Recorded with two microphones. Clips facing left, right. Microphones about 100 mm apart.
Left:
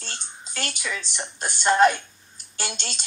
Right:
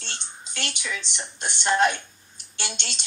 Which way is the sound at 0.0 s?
40° left (ahead or behind).